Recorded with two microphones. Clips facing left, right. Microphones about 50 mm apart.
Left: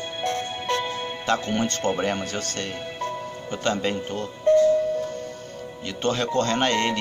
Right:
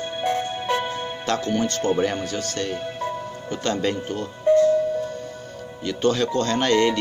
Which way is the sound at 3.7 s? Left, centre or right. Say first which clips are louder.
Even; left.